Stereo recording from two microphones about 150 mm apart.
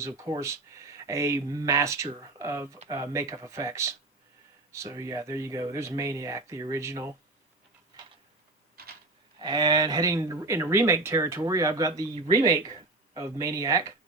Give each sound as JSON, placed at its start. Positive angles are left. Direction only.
{"t": 0.0, "sound": "speech", "side_deg": -20}
{"t": 8.8, "sound": "a sound", "side_deg": -90}
{"t": 9.4, "sound": "speech", "side_deg": -30}